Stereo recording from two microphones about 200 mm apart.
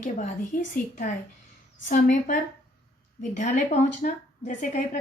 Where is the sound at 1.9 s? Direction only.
40° left (ahead or behind).